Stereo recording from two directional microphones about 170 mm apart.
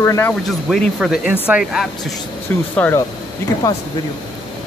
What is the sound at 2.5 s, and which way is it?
Speech, 10° left (ahead or behind).